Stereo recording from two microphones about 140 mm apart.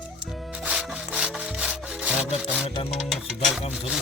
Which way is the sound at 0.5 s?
5° right (ahead or behind).